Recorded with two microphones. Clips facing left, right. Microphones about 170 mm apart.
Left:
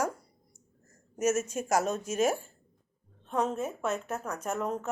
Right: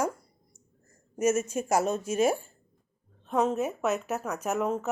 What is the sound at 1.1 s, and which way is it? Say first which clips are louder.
Speech: right 2 dB; 10° right (ahead or behind).